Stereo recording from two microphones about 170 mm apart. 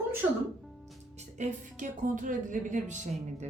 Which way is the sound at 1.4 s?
50° right (ahead or behind).